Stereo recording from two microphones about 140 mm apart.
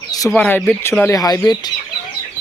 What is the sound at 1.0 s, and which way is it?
Speech, 25° left (ahead or behind).